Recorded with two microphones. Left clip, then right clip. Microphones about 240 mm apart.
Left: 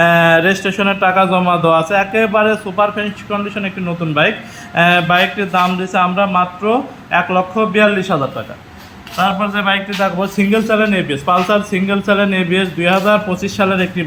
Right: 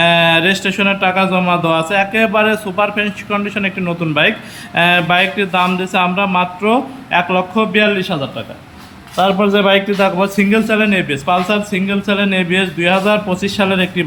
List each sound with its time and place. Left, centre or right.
0.0 s a man's voice: centre
9.1 s a man's voice: right
10.2 s a man's voice: centre